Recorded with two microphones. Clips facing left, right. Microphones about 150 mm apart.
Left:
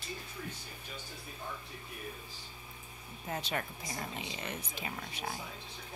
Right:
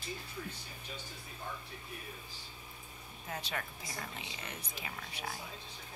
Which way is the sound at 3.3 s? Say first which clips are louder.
Left 4 dB; 30° left (ahead or behind).